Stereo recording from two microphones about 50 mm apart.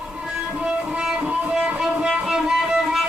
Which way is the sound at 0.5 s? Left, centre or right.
Right.